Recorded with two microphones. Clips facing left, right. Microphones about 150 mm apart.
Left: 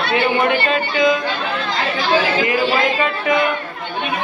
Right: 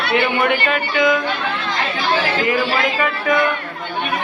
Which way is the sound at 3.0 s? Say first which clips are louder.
Even; 20° left (ahead or behind).